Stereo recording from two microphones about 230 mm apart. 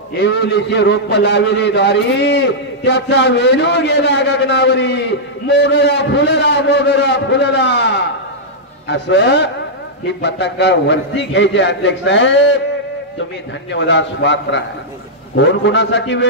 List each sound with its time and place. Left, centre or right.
0.2 s a man's voice: left
13.7 s a man's voice: left